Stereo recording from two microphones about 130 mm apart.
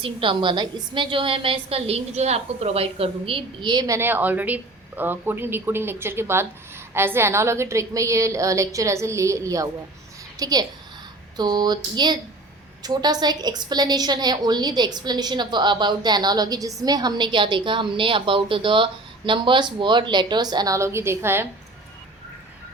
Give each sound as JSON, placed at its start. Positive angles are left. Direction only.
{"t": 0.0, "sound": "a woman's voice", "side_deg": -40}
{"t": 3.8, "sound": "a woman's voice", "side_deg": -20}